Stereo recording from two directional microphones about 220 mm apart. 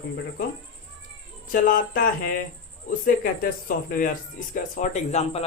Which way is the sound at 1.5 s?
40° left (ahead or behind).